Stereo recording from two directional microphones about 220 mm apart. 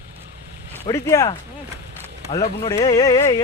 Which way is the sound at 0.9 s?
15° left (ahead or behind).